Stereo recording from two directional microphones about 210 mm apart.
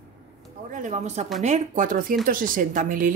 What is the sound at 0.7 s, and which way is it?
Speech, 35° right (ahead or behind).